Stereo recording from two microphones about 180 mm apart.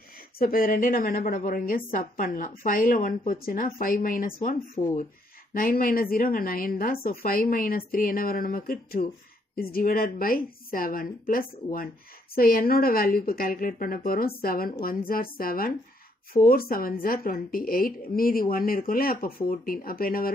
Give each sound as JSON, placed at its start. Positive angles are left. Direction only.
{"t": 0.4, "sound": "a woman's voice", "side_deg": 50}